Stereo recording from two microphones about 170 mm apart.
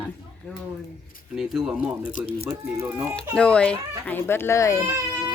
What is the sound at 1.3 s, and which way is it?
Speech, centre (ahead or behind).